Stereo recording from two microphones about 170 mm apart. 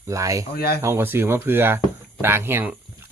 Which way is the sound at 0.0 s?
20° right (ahead or behind).